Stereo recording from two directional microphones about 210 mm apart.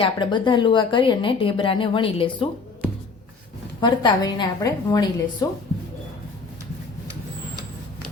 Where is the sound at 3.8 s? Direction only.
20° left (ahead or behind).